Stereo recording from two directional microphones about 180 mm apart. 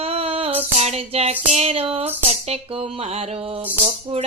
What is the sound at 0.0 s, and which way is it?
Child singing, 35° right (ahead or behind).